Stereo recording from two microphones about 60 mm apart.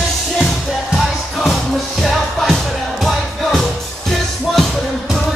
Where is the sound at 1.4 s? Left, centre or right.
Centre.